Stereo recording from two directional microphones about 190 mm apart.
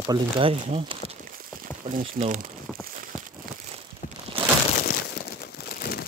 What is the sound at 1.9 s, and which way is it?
Speech, 40° right (ahead or behind).